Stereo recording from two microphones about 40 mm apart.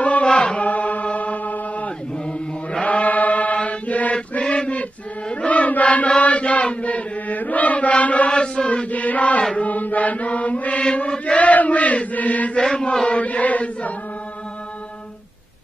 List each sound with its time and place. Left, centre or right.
0.0 s chant: left
0.3 s chant: left
0.7 s music: left
1.1 s chant: left
4.4 s a sound: left
5.3 s chant: left
8.3 s chant: left
8.9 s chant: left
12.5 s chant: left
13.0 s chant: left